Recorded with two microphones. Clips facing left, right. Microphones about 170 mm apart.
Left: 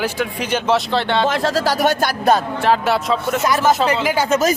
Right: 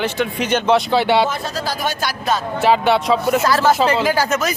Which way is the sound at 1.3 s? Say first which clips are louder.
Left 6 dB; 90° left.